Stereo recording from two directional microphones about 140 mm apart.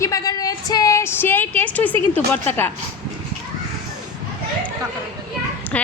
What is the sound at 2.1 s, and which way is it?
Speech, 15° left (ahead or behind).